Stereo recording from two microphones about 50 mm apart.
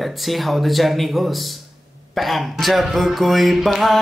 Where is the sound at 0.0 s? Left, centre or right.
Centre.